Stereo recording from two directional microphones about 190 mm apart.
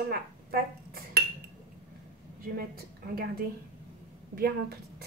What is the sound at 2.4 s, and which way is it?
A woman's voice, 50° right (ahead or behind).